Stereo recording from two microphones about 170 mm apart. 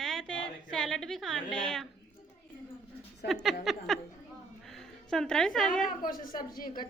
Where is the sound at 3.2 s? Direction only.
Centre (ahead or behind).